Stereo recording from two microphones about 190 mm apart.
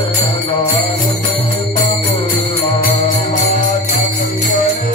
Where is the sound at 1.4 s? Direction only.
30° left (ahead or behind).